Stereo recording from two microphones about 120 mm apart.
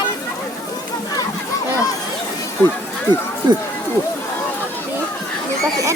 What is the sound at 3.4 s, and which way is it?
Speech, 40° right (ahead or behind).